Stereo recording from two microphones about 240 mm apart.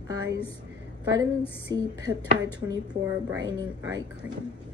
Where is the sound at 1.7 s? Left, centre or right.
Centre.